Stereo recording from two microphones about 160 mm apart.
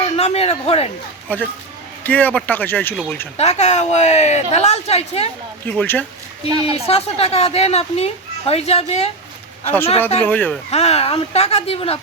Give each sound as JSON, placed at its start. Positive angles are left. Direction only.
{"t": 0.0, "sound": "speech", "side_deg": 40}
{"t": 1.3, "sound": "speech", "side_deg": 10}
{"t": 3.3, "sound": "speech", "side_deg": 45}
{"t": 5.7, "sound": "speech", "side_deg": 10}
{"t": 6.5, "sound": "a woman's voice", "side_deg": -25}
{"t": 6.8, "sound": "a woman's voice", "side_deg": 40}
{"t": 10.2, "sound": "speech", "side_deg": 10}
{"t": 10.7, "sound": "a woman's voice", "side_deg": 40}